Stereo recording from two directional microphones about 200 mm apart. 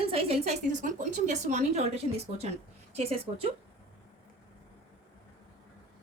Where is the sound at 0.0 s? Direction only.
30° right (ahead or behind).